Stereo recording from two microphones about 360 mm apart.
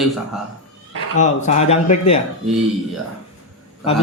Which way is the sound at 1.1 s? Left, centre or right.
Centre.